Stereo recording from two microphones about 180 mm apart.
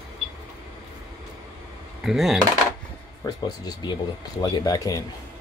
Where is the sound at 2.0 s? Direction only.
Centre (ahead or behind).